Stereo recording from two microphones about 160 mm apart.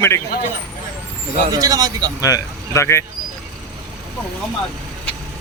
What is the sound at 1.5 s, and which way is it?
Speech, 20° right (ahead or behind).